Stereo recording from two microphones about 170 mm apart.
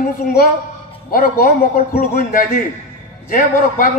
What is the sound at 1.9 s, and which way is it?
A man's voice, 50° left (ahead or behind).